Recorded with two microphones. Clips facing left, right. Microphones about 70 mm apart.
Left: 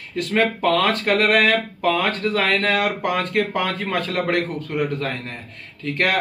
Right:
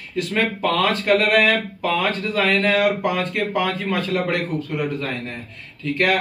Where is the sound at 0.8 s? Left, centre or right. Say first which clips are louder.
Right 1 dB; left.